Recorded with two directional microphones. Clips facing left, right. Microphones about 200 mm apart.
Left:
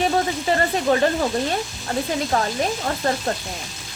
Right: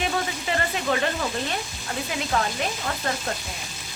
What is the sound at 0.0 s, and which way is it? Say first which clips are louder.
Sizzle: left 6 dB; 35° left (ahead or behind).